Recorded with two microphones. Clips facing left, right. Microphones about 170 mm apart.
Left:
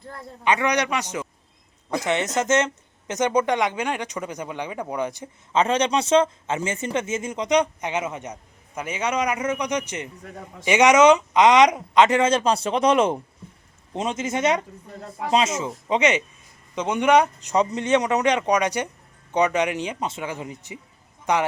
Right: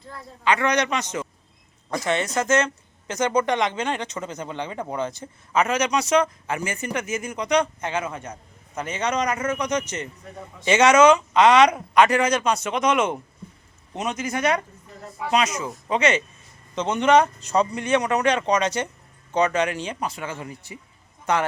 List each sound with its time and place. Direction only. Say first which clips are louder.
0.4 s speech: even; 15° left (ahead or behind)
5.5 s speech: left 1 dB; 30° left (ahead or behind)